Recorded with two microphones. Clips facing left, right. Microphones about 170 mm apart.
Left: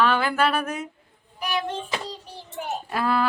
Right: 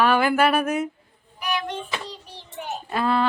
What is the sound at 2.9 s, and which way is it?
Speech, 5° left (ahead or behind).